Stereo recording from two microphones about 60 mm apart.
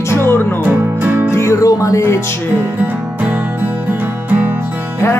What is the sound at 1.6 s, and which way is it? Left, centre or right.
Speech, left.